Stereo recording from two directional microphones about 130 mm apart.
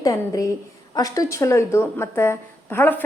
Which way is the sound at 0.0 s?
25° left (ahead or behind).